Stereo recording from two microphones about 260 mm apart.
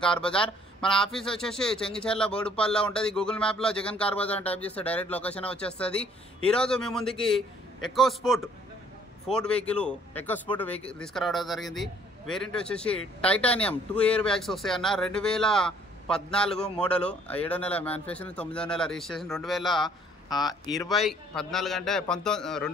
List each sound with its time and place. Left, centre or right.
0.0 s speech: centre
20.2 s speech: centre
20.9 s speech: centre